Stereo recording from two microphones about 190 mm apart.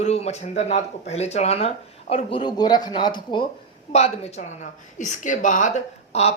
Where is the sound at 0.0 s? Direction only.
35° left (ahead or behind).